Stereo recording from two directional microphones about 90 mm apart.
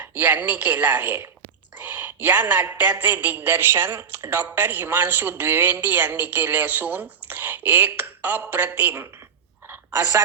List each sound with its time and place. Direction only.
0.2 s a woman's voice: 20° right (ahead or behind)
9.9 s a woman's voice: 35° right (ahead or behind)